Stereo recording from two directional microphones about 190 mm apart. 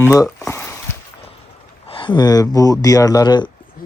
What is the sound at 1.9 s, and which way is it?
Speech, 25° left (ahead or behind).